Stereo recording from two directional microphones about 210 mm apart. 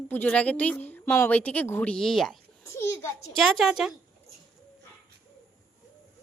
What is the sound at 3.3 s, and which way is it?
Speech, centre (ahead or behind).